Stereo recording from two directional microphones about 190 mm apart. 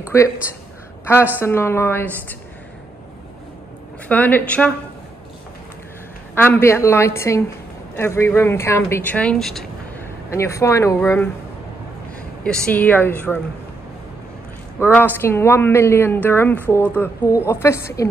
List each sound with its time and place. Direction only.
0.1 s a woman's voice: 15° left (ahead or behind)
1.4 s a woman's voice: 15° left (ahead or behind)
4.1 s a woman's voice: 10° left (ahead or behind)
6.3 s a woman's voice: 10° left (ahead or behind)
10.3 s a woman's voice: 15° left (ahead or behind)
12.4 s a woman's voice: 5° left (ahead or behind)
15.0 s a woman's voice: 10° left (ahead or behind)